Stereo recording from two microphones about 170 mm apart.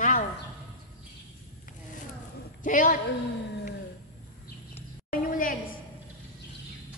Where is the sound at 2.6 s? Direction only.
50° left (ahead or behind).